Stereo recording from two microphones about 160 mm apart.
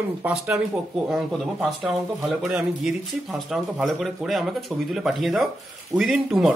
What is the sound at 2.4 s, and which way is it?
Speech, 5° right (ahead or behind).